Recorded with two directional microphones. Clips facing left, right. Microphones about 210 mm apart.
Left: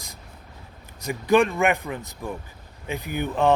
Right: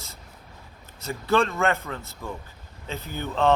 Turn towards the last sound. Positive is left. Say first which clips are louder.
# left 2 dB
turn(degrees=15)  # may be behind; listen again after turning